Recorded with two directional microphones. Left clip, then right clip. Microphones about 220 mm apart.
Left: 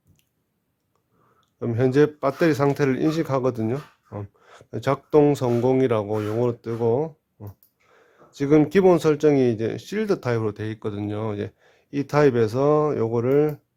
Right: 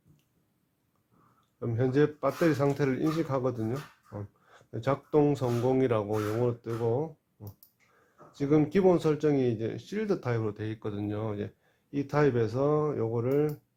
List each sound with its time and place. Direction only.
1.5 s speech: 40° left (ahead or behind)